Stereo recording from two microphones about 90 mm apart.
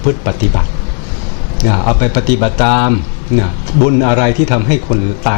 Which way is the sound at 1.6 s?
20° left (ahead or behind).